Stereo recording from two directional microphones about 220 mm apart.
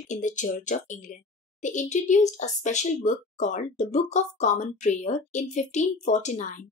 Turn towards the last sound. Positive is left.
turn(degrees=35)  # may be behind; listen again after turning